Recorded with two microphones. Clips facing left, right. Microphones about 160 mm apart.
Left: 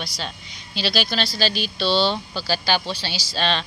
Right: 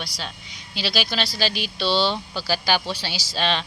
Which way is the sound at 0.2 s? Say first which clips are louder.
Left 2 dB; 5° right (ahead or behind).